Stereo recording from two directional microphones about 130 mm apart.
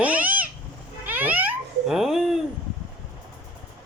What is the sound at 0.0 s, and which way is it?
Cat, 10° right (ahead or behind).